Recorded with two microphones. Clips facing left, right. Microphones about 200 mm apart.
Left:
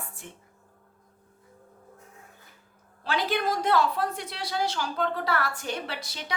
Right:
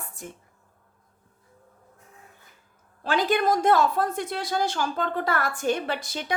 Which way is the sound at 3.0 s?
50° right (ahead or behind).